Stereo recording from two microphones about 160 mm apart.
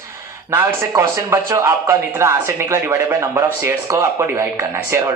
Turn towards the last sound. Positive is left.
turn(degrees=-15)  # may be behind; listen again after turning